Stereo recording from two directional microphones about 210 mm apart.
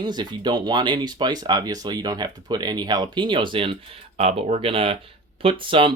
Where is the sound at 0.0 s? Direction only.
20° right (ahead or behind).